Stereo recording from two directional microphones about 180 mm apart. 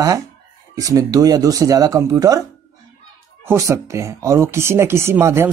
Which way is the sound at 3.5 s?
15° right (ahead or behind).